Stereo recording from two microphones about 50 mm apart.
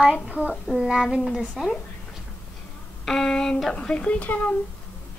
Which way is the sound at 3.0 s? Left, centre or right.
Centre.